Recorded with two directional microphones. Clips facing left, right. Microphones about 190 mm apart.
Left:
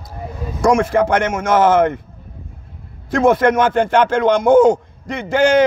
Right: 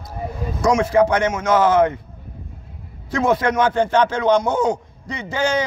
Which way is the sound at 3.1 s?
50° left (ahead or behind).